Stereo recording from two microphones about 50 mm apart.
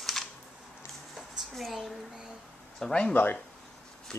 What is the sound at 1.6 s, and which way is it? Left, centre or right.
Speech, centre.